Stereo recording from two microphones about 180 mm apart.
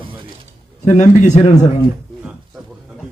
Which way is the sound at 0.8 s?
40° left (ahead or behind).